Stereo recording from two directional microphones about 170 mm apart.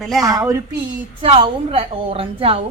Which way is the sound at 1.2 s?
35° right (ahead or behind).